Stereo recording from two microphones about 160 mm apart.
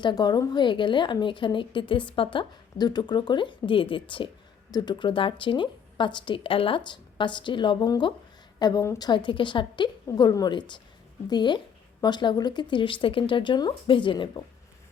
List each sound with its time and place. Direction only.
0.0 s a woman's voice: 25° left (ahead or behind)